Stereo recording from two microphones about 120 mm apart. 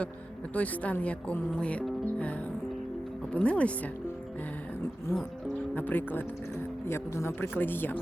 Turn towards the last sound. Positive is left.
turn(degrees=15)  # may be behind; listen again after turning